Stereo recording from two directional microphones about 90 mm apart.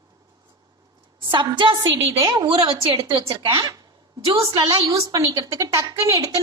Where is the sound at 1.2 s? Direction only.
65° right (ahead or behind).